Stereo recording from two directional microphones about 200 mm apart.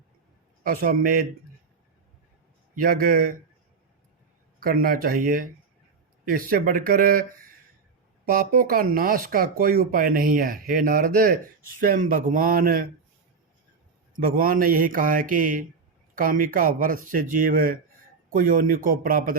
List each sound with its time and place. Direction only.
0.6 s speech: 45° right (ahead or behind)
2.7 s speech: 45° right (ahead or behind)
4.6 s speech: 45° right (ahead or behind)
14.2 s speech: 45° right (ahead or behind)